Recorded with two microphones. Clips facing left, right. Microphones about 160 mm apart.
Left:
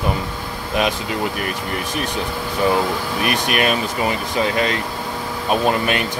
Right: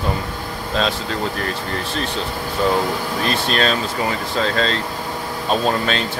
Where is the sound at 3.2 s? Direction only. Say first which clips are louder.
Even; 15° left (ahead or behind).